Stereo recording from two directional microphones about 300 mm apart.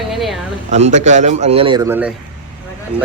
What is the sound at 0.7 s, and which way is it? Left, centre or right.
A man's voice, right.